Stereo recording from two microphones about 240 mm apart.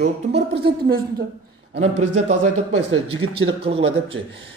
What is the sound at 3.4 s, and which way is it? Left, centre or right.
Speech, right.